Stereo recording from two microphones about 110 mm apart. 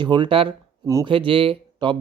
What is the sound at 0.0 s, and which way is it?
Speech, 45° right (ahead or behind).